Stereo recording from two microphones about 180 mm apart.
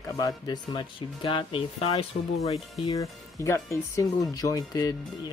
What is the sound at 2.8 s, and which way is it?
Speech, 20° left (ahead or behind).